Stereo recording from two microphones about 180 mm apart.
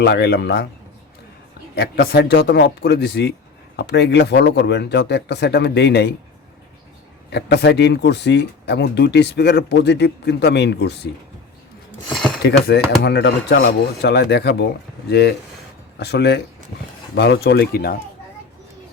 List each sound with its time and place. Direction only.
0.0 s a man's voice: 65° left (ahead or behind)
1.7 s a man's voice: 60° left (ahead or behind)
7.3 s speech: 70° left (ahead or behind)
12.0 s speech: 5° left (ahead or behind)
12.4 s speech: 65° left (ahead or behind)
16.0 s a man's voice: 65° left (ahead or behind)